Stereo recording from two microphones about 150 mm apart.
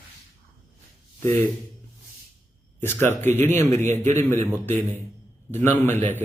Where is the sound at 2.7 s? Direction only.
15° left (ahead or behind).